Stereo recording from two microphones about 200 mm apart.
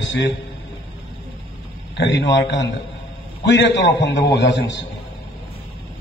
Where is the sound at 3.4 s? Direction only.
60° left (ahead or behind).